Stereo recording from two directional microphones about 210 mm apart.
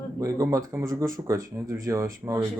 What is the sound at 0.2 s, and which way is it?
Speech, 15° right (ahead or behind).